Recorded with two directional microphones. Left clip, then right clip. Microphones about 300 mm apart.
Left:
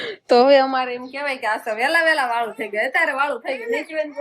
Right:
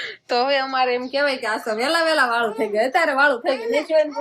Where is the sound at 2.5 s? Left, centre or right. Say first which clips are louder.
Right 1 dB; centre.